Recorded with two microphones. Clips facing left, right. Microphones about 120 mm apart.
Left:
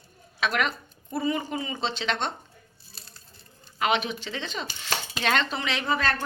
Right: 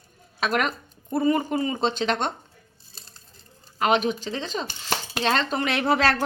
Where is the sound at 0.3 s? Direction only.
40° right (ahead or behind).